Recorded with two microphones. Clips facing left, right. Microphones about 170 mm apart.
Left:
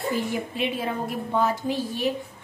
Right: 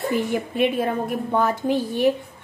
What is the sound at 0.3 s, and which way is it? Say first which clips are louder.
A woman's voice: right 6 dB; 55° right (ahead or behind).